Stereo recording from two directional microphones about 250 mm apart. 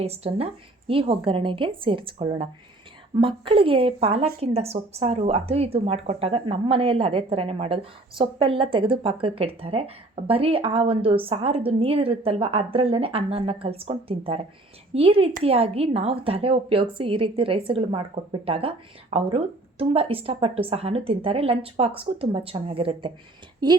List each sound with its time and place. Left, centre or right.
0.0 s a woman's voice: right